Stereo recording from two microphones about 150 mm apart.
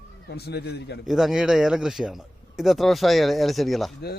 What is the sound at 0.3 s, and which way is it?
Speech, 90° left.